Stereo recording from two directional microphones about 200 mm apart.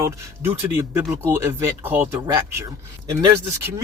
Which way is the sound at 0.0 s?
10° right (ahead or behind).